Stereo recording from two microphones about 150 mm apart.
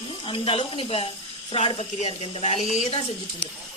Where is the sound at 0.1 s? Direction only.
35° left (ahead or behind).